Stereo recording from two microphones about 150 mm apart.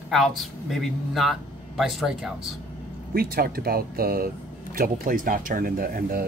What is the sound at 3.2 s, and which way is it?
Speech, 90° right.